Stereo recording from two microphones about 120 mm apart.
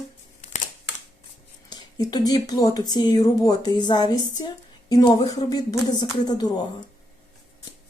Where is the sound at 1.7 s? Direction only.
35° left (ahead or behind).